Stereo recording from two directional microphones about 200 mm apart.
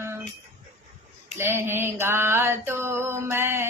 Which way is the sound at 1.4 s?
10° right (ahead or behind).